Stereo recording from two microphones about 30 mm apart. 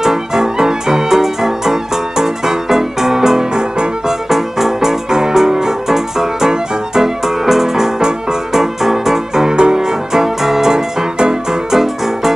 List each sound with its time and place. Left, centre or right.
0.0 s music: centre
4.3 s music: centre